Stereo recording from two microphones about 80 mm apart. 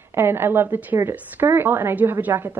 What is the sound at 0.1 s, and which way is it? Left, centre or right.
A woman's voice, right.